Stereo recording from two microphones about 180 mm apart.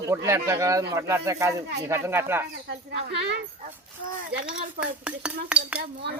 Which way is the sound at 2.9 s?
70° right (ahead or behind).